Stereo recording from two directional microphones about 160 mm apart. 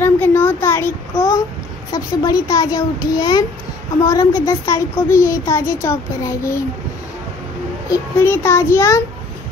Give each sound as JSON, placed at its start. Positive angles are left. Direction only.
{"t": 0.0, "sound": "child singing", "side_deg": 15}
{"t": 1.9, "sound": "a woman's voice", "side_deg": 25}
{"t": 7.9, "sound": "a child's voice", "side_deg": 15}